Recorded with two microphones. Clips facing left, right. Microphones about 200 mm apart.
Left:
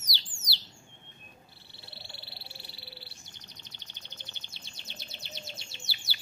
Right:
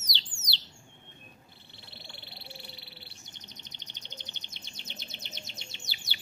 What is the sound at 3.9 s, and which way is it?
Chirp, 20° right (ahead or behind).